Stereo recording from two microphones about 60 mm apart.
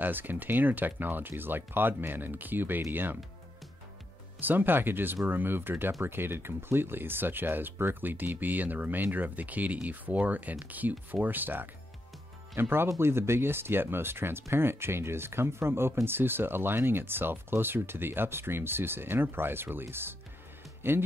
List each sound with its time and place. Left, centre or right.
0.0 s speech: right
4.4 s speech: right
12.8 s speech: right